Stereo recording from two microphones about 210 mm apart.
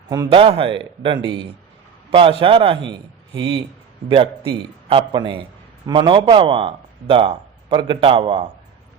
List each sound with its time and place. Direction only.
0.1 s a man's voice: 20° right (ahead or behind)